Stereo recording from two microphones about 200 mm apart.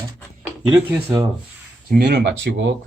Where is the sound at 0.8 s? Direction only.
10° right (ahead or behind).